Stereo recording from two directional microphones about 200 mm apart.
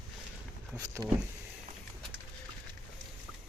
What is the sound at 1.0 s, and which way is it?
Speech, 15° right (ahead or behind).